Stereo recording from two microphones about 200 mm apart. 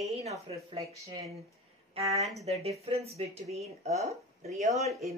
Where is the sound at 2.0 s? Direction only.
30° right (ahead or behind).